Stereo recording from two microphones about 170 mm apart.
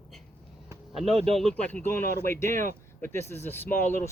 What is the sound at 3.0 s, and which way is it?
Speech, 15° left (ahead or behind).